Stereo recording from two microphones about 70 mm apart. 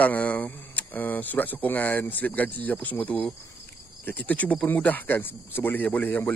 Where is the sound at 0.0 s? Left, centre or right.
Left.